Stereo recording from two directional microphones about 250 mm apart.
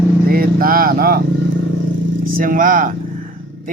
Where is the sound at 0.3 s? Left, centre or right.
Right.